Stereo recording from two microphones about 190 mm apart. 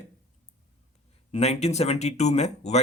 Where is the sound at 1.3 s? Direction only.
35° left (ahead or behind).